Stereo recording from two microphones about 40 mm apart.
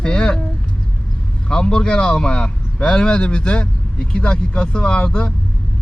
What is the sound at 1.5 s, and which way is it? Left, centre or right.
A man's voice, left.